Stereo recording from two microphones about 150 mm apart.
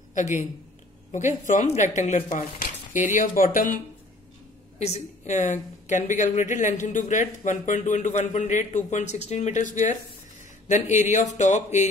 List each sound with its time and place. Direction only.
0.1 s a man's voice: 55° left (ahead or behind)
3.1 s speech: 65° left (ahead or behind)
4.7 s a woman's voice: 45° left (ahead or behind)